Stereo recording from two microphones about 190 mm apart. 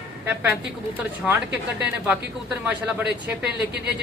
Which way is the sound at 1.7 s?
5° right (ahead or behind).